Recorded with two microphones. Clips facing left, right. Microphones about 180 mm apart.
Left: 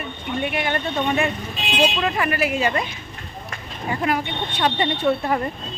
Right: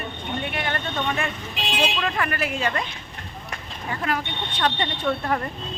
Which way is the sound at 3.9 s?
15° left (ahead or behind).